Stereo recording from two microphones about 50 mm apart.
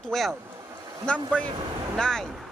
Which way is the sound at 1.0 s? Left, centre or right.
Left.